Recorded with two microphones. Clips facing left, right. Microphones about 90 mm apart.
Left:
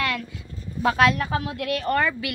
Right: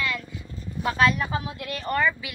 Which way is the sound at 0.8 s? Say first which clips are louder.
Left 3 dB; 90° left.